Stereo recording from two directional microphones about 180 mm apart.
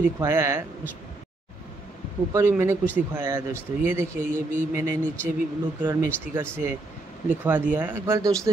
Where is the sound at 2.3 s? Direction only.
15° right (ahead or behind).